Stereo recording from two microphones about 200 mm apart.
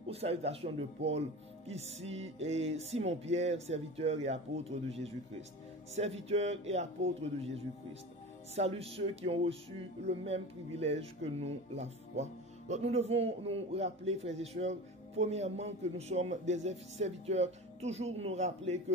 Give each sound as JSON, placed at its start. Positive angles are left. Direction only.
{"t": 0.1, "sound": "speech", "side_deg": -30}